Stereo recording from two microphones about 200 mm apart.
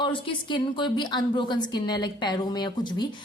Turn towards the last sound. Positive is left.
turn(degrees=20)  # may be behind; listen again after turning